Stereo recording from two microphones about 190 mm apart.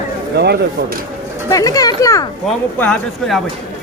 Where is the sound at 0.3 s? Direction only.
60° right (ahead or behind).